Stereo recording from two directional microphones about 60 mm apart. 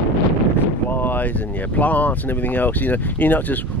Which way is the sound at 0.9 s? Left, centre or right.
Left.